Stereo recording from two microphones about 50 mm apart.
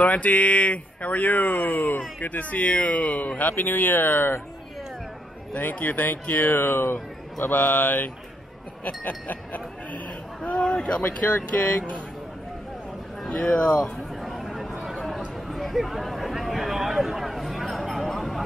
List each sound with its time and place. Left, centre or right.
0.0 s speech: left
5.6 s speech: left
10.4 s speech: left
11.1 s speech: left
13.2 s speech: centre
14.2 s a sound: centre